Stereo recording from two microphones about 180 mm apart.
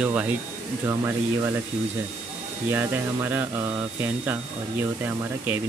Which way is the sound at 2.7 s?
10° right (ahead or behind).